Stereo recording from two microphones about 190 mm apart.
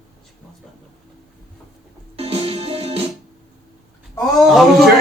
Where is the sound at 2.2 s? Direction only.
30° right (ahead or behind).